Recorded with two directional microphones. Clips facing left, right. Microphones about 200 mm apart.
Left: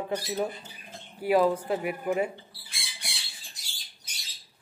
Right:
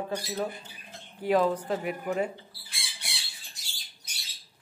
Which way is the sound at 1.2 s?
10° left (ahead or behind).